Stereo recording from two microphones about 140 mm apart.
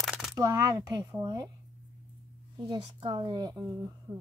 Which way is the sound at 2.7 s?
35° right (ahead or behind).